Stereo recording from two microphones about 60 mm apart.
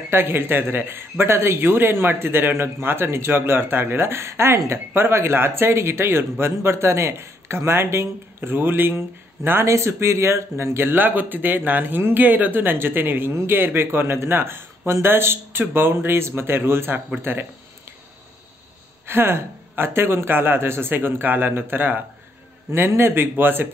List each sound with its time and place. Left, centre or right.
0.1 s a man's voice: right
9.7 s a man's voice: right
17.2 s a sound: right
19.0 s a man's voice: right
22.7 s a man's voice: right